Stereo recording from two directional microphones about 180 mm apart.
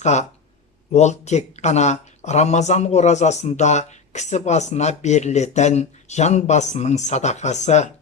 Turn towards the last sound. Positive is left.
turn(degrees=40)  # may be behind; listen again after turning